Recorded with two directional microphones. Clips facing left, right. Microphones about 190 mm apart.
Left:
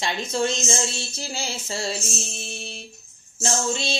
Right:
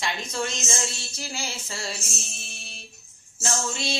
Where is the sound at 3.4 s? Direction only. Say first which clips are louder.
Left 4 dB; 25° left (ahead or behind).